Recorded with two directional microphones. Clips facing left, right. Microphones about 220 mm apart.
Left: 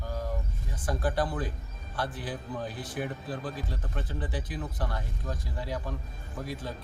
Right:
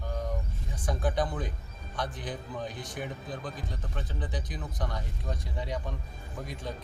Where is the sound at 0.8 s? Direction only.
5° left (ahead or behind).